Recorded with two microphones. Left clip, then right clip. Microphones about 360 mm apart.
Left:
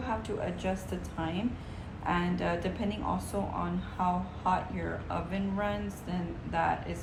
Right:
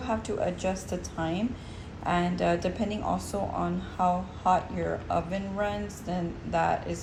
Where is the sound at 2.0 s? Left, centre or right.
Centre.